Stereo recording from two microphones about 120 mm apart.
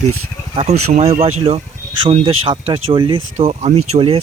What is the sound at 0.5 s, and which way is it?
Speech, 60° right (ahead or behind).